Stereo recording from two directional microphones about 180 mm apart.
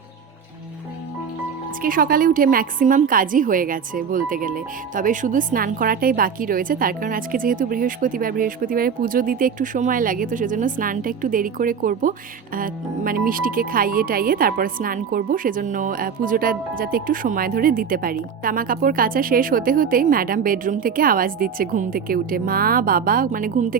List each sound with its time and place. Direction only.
1.8 s speech: 50° right (ahead or behind)